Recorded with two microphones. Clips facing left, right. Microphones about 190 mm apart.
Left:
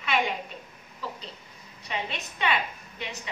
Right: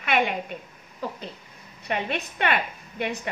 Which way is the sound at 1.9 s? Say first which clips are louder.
Right 6 dB; 55° right (ahead or behind).